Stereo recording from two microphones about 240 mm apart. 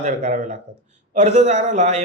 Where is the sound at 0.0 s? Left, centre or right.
Right.